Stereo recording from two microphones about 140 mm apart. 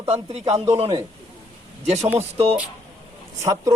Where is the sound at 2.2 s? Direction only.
45° right (ahead or behind).